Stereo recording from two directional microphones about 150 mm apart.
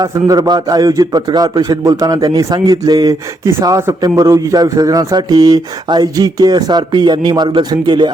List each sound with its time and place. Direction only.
0.0 s a man's voice: 25° right (ahead or behind)